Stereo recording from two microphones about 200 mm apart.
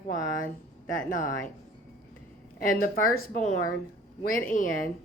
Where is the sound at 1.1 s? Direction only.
40° left (ahead or behind).